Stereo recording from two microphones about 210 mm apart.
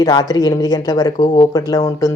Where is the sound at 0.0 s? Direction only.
20° left (ahead or behind).